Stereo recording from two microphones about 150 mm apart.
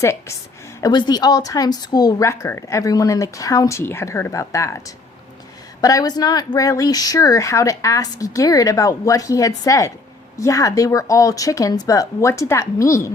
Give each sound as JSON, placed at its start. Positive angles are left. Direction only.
{"t": 0.0, "sound": "a woman's voice", "side_deg": 20}
{"t": 5.8, "sound": "speech", "side_deg": 25}